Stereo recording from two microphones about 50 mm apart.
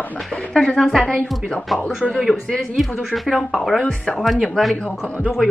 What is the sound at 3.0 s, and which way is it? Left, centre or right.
Speech, centre.